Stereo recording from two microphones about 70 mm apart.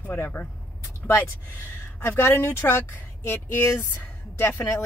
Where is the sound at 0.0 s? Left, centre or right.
Left.